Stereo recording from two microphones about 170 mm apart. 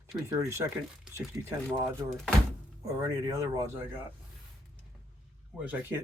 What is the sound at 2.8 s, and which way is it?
Speech, 20° right (ahead or behind).